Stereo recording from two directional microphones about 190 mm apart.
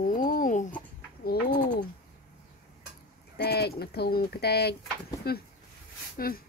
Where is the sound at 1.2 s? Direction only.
55° left (ahead or behind).